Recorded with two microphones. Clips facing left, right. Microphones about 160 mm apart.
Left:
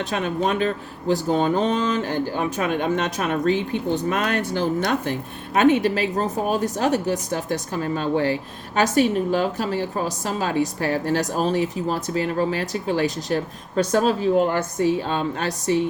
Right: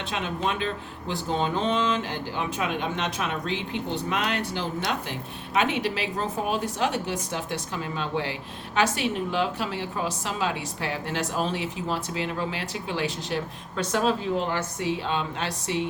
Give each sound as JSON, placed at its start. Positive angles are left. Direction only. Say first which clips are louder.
{"t": 0.1, "sound": "a woman's voice", "louder": "left 4 dB", "side_deg": 45}